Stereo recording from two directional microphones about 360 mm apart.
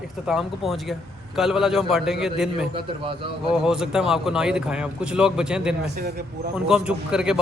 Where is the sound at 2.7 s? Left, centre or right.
Centre.